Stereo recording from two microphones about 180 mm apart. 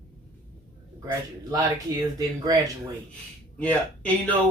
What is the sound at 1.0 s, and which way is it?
Speech, 20° right (ahead or behind).